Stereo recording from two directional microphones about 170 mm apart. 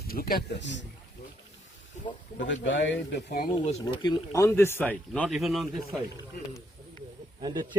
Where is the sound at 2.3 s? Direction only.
90° left; by 3.5 s 70° left (ahead or behind).